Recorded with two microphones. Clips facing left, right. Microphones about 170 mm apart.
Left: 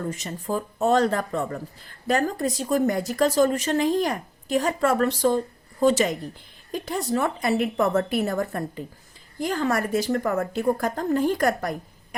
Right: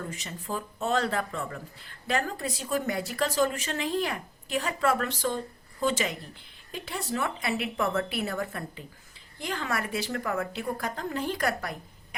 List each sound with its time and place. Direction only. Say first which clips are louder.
0.1 s a woman's voice: left 7 dB; 40° left (ahead or behind)